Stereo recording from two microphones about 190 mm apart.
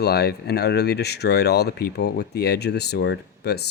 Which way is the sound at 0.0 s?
60° left (ahead or behind).